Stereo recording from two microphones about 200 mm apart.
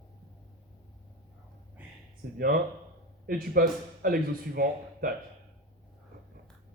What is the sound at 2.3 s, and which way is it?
Speech, 45° right (ahead or behind).